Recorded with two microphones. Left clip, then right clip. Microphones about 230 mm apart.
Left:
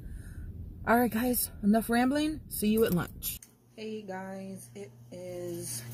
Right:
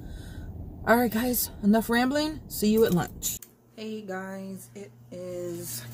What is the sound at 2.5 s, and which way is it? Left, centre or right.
Speech, centre.